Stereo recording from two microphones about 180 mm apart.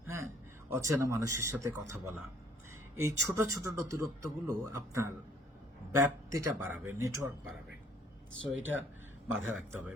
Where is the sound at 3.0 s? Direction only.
15° right (ahead or behind).